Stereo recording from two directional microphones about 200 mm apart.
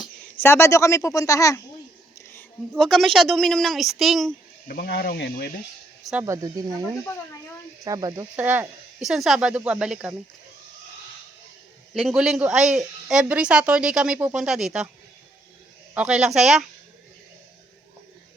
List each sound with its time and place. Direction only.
0.4 s speech: 10° left (ahead or behind)
2.7 s a woman's voice: centre (ahead or behind)
4.7 s speech: 50° left (ahead or behind)
6.0 s speech: centre (ahead or behind)
6.2 s speech: 15° right (ahead or behind)
7.9 s speech: 20° right (ahead or behind)
8.4 s a woman's voice: 10° right (ahead or behind)
11.9 s a woman's voice: centre (ahead or behind)
16.0 s a woman's voice: 5° right (ahead or behind)